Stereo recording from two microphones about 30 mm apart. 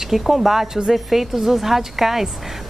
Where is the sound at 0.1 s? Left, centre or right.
Centre.